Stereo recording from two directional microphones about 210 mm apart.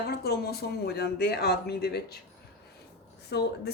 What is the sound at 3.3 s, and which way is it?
Speech, 50° left (ahead or behind).